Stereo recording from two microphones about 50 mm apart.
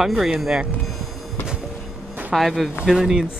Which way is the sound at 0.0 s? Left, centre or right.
Centre.